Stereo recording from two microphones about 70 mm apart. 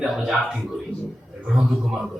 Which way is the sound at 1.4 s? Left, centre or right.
Centre.